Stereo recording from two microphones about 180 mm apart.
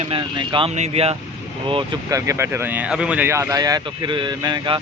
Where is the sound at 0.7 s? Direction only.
35° right (ahead or behind).